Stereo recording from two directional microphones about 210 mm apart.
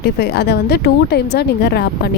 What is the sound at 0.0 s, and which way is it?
Speech, 50° left (ahead or behind).